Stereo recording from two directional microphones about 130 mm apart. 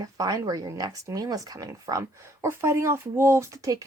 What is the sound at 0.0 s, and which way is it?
Speech, 30° right (ahead or behind).